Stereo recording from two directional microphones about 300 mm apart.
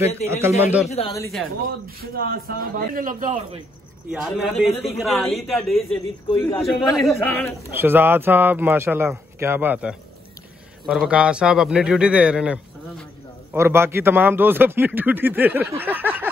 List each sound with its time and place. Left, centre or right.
0.0 s speech: left
0.3 s speech: centre
0.8 s speech: centre
2.0 s a man's voice: right
4.1 s a man's voice: centre
7.6 s a man's voice: centre